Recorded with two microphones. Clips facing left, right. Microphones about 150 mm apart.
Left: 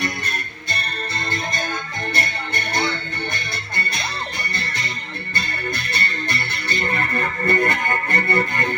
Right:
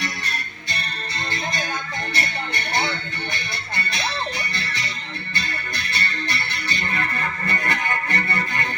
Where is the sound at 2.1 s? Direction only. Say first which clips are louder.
Left 1 dB; 50° left (ahead or behind).